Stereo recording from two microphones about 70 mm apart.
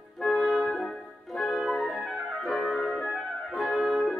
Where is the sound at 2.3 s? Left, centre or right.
Centre.